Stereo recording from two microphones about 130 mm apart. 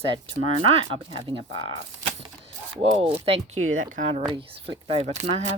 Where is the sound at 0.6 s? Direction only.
40° right (ahead or behind).